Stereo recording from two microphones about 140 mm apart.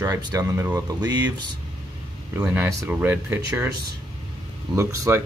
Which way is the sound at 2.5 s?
15° right (ahead or behind).